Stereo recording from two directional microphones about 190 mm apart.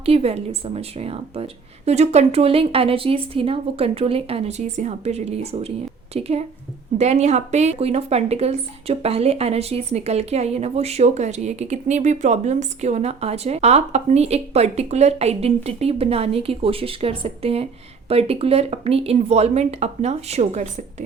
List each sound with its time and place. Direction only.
0.0 s speech: 30° right (ahead or behind)